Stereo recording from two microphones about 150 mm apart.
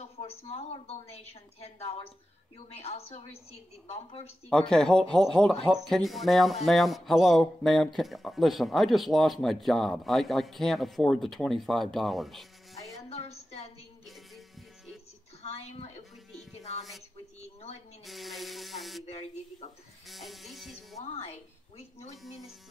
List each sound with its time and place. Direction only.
0.0 s a woman's voice: 45° left (ahead or behind)
4.5 s speech: 5° left (ahead or behind)
13.1 s a sound: 45° left (ahead or behind)
15.4 s a sound: 45° left (ahead or behind)
18.0 s speech: centre (ahead or behind)
19.0 s a woman's voice: 40° left (ahead or behind)
20.1 s speech: centre (ahead or behind)
21.0 s a woman's voice: 40° left (ahead or behind)
22.1 s speech: centre (ahead or behind)